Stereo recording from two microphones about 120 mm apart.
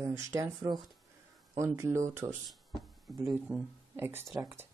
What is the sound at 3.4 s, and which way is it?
Speech, 15° right (ahead or behind).